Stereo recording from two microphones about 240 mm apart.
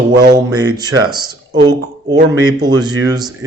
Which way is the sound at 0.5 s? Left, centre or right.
Centre.